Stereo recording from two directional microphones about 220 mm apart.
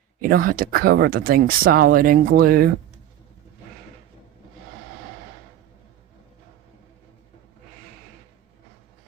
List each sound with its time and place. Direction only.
0.2 s speech: 40° right (ahead or behind)